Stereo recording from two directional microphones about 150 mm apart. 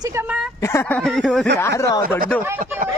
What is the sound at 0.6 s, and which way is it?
Speech, 15° left (ahead or behind).